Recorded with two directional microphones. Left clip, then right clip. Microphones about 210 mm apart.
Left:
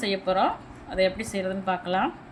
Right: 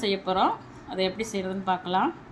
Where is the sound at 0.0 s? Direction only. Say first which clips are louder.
Even; 10° left (ahead or behind).